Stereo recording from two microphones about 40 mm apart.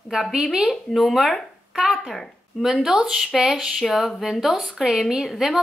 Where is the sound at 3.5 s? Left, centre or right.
Centre.